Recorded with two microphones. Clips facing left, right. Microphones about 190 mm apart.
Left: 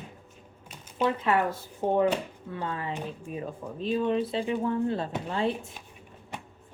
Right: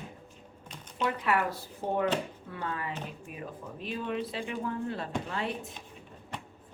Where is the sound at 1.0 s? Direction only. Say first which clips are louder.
Left 3 dB; 25° left (ahead or behind).